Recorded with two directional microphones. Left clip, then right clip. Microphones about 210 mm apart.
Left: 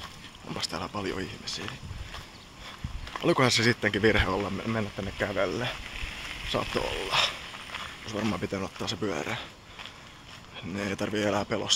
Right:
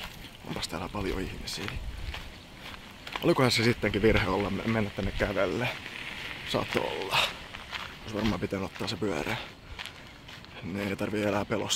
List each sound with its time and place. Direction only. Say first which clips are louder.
0.5 s speech: left 2 dB; centre (ahead or behind)
3.2 s speech: left 1 dB; centre (ahead or behind)
10.7 s speech: left 1 dB; 5° left (ahead or behind)